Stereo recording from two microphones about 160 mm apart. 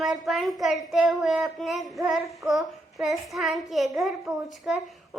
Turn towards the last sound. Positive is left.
turn(degrees=0)  # may be behind; listen again after turning